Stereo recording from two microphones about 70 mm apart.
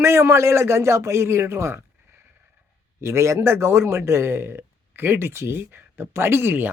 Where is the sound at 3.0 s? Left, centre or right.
Right.